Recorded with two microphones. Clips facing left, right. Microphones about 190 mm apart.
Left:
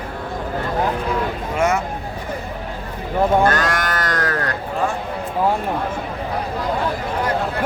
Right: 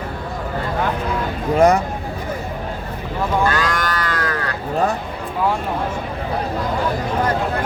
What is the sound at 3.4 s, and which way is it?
Livestock, 50° left (ahead or behind).